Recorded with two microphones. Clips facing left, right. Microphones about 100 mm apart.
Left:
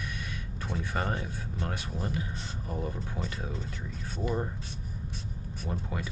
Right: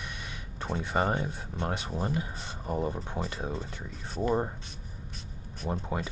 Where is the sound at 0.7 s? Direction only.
30° right (ahead or behind).